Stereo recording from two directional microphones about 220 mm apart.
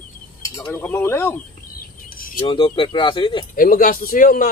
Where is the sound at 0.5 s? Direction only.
10° left (ahead or behind).